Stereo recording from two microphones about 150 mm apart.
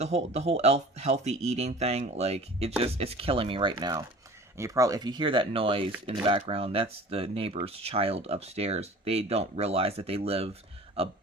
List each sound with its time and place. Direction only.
0.0 s speech: 45° right (ahead or behind)